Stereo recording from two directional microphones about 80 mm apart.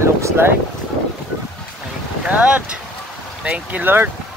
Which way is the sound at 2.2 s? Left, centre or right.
Centre.